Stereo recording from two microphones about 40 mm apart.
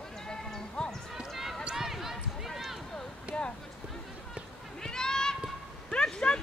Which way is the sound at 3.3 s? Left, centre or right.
Right.